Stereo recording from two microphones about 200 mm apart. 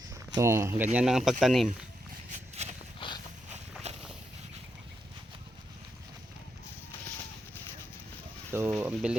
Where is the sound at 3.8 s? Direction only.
35° right (ahead or behind).